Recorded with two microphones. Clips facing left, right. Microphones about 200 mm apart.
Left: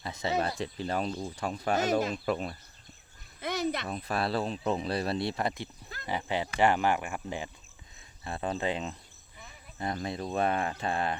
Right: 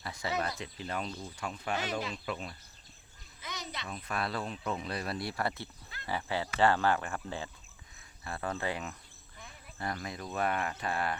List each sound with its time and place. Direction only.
0.0 s speech: 20° left (ahead or behind); by 4.0 s 50° left (ahead or behind)
4.0 s speech: 30° left (ahead or behind)